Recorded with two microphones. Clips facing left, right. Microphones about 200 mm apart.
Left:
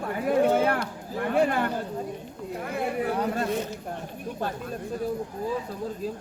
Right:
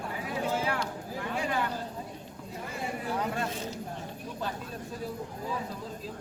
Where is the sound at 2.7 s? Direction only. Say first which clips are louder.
Left 8 dB; 60° left (ahead or behind).